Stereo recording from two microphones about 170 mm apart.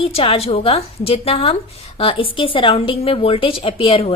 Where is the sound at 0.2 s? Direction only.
35° left (ahead or behind).